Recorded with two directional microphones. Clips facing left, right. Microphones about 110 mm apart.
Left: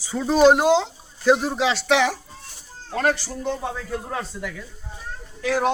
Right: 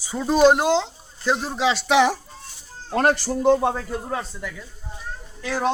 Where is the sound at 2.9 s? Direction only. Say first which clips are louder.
Right 3 dB; 55° right (ahead or behind).